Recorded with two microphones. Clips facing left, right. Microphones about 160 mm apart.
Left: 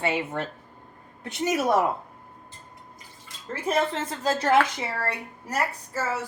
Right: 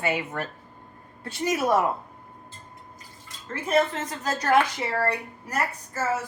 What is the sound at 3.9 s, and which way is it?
Speech, 25° left (ahead or behind).